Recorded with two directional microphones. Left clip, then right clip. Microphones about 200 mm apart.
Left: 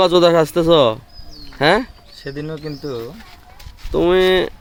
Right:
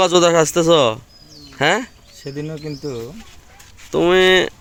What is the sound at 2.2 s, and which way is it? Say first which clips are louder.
Speech: left 1 dB; 45° right (ahead or behind).